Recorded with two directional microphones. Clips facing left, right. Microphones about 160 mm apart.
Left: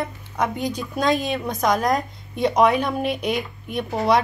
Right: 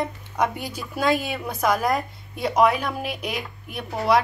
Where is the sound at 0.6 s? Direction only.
10° right (ahead or behind).